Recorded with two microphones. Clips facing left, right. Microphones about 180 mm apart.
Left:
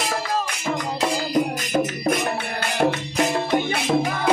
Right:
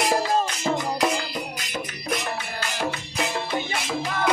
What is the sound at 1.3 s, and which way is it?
Music, 45° left (ahead or behind).